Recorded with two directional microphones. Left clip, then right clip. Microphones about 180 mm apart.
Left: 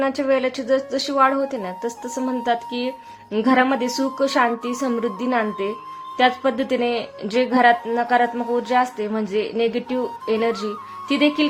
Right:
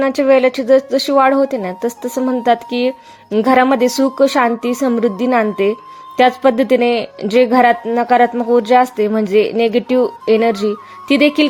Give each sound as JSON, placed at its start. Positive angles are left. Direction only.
{"t": 0.0, "sound": "speech", "side_deg": -35}